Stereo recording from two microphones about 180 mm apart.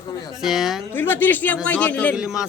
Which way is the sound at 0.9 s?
10° left (ahead or behind).